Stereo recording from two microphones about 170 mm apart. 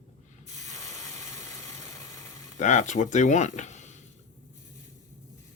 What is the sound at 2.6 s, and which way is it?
Speech, 45° left (ahead or behind).